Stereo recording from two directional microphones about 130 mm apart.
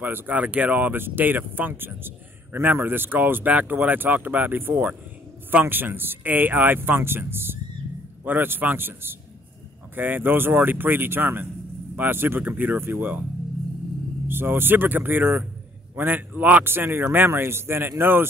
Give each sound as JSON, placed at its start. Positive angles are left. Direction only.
{"t": 0.0, "sound": "speech", "side_deg": -15}
{"t": 14.2, "sound": "speech", "side_deg": -15}